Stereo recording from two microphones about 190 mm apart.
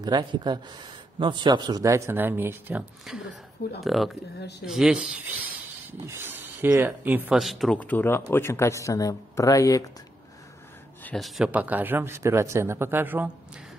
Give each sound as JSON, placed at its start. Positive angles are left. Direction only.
{"t": 0.0, "sound": "speech", "side_deg": -20}
{"t": 4.4, "sound": "speech", "side_deg": 60}
{"t": 4.6, "sound": "speech", "side_deg": -5}
{"t": 11.1, "sound": "speech", "side_deg": 0}